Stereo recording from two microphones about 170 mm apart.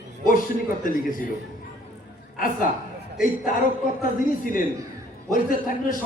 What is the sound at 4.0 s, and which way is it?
Speech, 55° left (ahead or behind).